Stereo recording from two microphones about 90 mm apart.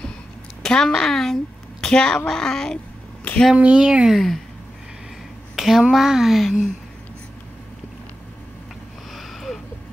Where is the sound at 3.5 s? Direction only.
10° right (ahead or behind).